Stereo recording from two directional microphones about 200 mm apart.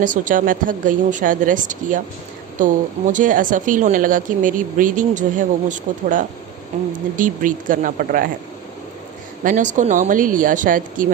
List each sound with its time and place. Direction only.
0.0 s speech: 40° right (ahead or behind)
9.4 s speech: 40° right (ahead or behind)